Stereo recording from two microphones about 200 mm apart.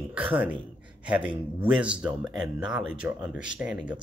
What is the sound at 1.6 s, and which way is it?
Speech, 5° right (ahead or behind).